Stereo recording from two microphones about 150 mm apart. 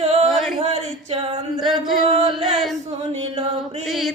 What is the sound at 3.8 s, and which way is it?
Mantra, centre (ahead or behind).